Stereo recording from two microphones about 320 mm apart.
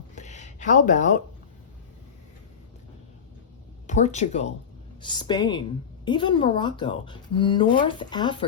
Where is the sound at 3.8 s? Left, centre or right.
Left.